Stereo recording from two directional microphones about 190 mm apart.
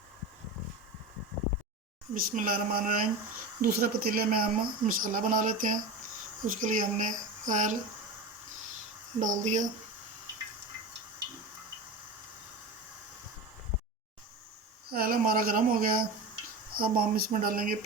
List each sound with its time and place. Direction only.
2.1 s speech: 45° right (ahead or behind)
9.2 s speech: 40° right (ahead or behind)
14.8 s speech: 50° right (ahead or behind)